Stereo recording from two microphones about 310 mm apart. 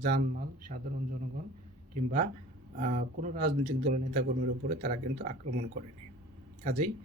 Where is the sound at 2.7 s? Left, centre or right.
Right.